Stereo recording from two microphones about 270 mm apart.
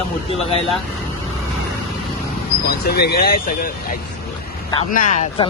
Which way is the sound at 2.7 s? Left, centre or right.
Left.